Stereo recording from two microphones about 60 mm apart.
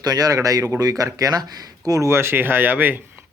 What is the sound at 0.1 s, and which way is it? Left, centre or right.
Speech, right.